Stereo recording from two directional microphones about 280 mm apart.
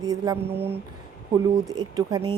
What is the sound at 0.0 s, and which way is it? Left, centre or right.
Speech, centre.